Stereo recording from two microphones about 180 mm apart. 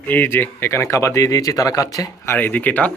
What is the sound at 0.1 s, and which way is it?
A man's voice, 10° left (ahead or behind).